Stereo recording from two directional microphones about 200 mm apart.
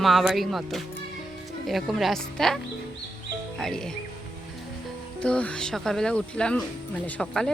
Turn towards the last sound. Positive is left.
turn(degrees=5)  # may be behind; listen again after turning